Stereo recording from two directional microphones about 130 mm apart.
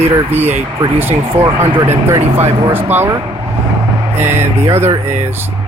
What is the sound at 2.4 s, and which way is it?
Speech, 40° right (ahead or behind).